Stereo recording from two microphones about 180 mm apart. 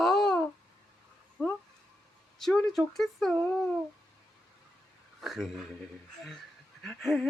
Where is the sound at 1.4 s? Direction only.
5° left (ahead or behind).